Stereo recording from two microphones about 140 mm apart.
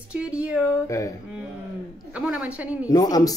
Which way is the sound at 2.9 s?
25° left (ahead or behind).